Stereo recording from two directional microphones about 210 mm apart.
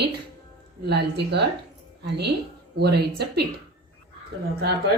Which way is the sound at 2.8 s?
50° right (ahead or behind).